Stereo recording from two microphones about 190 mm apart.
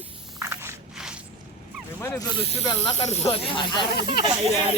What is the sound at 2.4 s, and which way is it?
Speech, 35° left (ahead or behind).